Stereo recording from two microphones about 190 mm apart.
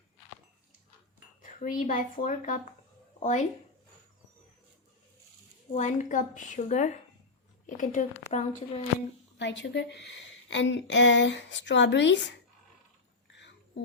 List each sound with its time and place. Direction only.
1.4 s speech: 45° left (ahead or behind)
5.7 s a woman's voice: 40° left (ahead or behind)
9.4 s a woman's voice: 70° left (ahead or behind)